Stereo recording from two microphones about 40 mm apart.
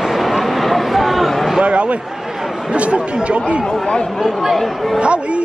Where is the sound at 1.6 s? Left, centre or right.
Right.